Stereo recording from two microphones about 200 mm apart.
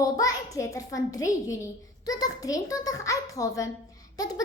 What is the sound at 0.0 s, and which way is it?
A child's voice, 15° left (ahead or behind).